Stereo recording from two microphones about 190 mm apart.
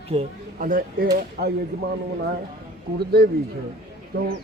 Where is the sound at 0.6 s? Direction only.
45° right (ahead or behind).